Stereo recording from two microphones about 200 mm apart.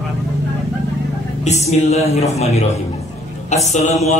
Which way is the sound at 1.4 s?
35° left (ahead or behind).